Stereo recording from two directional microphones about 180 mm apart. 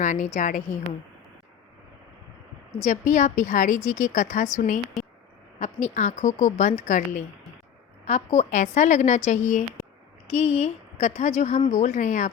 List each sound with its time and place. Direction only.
0.0 s a woman's voice: 45° left (ahead or behind)
2.8 s a woman's voice: 45° left (ahead or behind)